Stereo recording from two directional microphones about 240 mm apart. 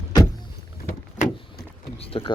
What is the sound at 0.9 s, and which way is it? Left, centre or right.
Vehicle, left.